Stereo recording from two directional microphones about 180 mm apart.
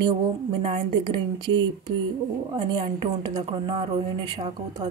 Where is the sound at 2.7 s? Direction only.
25° right (ahead or behind).